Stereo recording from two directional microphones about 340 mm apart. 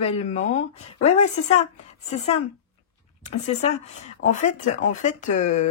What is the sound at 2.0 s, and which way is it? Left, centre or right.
Speech, centre.